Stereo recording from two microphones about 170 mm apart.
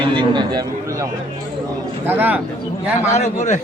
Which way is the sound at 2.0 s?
10° right (ahead or behind).